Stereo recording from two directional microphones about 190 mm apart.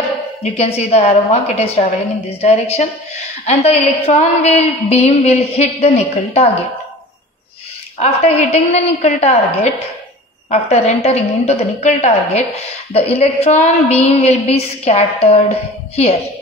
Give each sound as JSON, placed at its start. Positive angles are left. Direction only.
{"t": 0.4, "sound": "a woman's voice", "side_deg": 35}
{"t": 8.0, "sound": "a woman's voice", "side_deg": 35}